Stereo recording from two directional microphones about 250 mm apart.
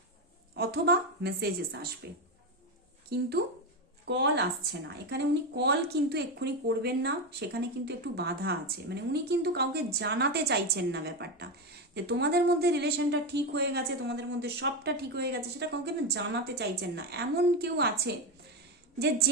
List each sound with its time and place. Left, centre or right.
0.5 s a woman's voice: right
3.1 s a woman's voice: right
18.9 s a woman's voice: right